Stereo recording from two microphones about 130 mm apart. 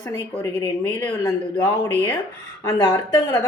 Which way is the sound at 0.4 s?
20° left (ahead or behind).